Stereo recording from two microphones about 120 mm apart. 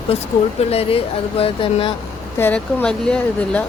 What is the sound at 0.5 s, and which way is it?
Speech, 55° left (ahead or behind).